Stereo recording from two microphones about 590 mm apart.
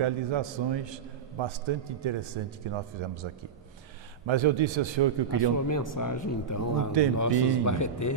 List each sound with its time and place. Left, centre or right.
0.0 s a man's voice: right
4.3 s a man's voice: right
5.7 s a man's voice: left